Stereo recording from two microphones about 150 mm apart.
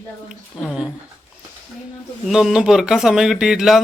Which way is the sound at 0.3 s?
5° right (ahead or behind).